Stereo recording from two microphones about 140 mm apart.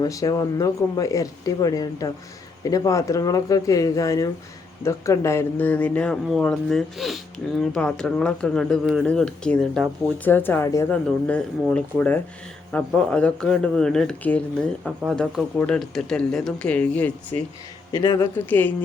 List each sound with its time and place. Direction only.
0.0 s speech: 25° left (ahead or behind)
11.3 s speech: 10° left (ahead or behind)
17.9 s speech: 25° left (ahead or behind)